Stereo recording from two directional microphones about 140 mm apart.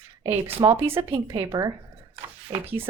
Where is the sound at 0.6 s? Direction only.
15° right (ahead or behind).